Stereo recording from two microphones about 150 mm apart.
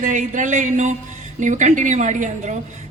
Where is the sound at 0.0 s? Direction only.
55° right (ahead or behind).